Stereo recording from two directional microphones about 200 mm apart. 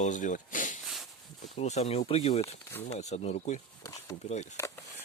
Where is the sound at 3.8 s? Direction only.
15° left (ahead or behind).